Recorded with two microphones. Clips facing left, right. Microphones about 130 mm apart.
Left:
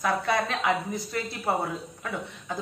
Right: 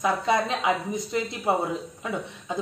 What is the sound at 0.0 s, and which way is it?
A woman's voice, 20° right (ahead or behind).